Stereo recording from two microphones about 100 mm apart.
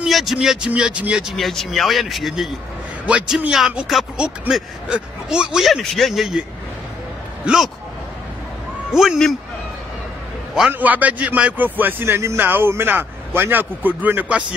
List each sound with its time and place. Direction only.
0.0 s speech: centre (ahead or behind)
1.3 s speech: 5° left (ahead or behind)
7.4 s speech: 5° right (ahead or behind)
8.9 s speech: 5° right (ahead or behind)
10.7 s a man's voice: 15° right (ahead or behind)